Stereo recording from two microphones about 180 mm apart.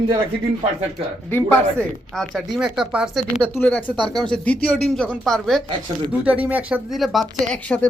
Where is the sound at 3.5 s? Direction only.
10° left (ahead or behind).